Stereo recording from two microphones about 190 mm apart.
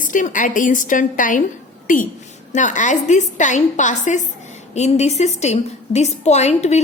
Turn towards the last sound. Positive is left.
turn(degrees=35)  # may be behind; listen again after turning